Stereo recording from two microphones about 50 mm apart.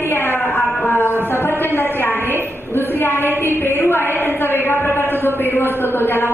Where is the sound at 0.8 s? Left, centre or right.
Left.